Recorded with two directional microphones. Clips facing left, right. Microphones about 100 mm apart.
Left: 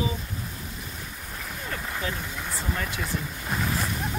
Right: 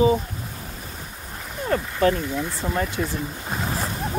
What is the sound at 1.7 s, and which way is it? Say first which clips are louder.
Speech: right 13 dB; 50° right (ahead or behind).